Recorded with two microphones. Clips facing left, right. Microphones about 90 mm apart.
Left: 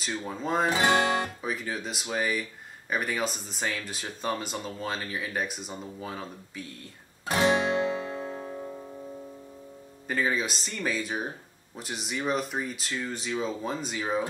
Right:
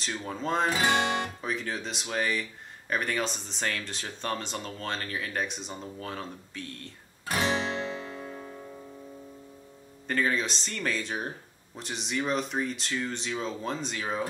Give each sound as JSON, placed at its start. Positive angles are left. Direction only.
{"t": 0.0, "sound": "speech", "side_deg": 5}
{"t": 0.7, "sound": "guitar", "side_deg": 20}
{"t": 1.4, "sound": "speech", "side_deg": 5}
{"t": 7.2, "sound": "guitar", "side_deg": 25}
{"t": 8.0, "sound": "music", "side_deg": 30}
{"t": 10.0, "sound": "speech", "side_deg": 5}